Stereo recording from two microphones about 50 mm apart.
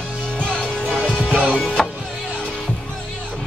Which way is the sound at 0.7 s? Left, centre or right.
Right.